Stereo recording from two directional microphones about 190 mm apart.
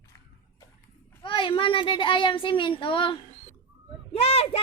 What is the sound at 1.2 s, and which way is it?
A child's voice, 25° left (ahead or behind).